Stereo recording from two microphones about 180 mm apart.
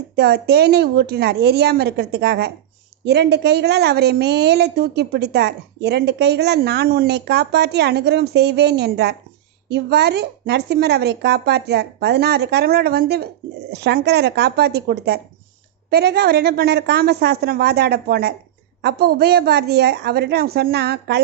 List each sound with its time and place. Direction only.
0.2 s a woman's voice: 65° right (ahead or behind)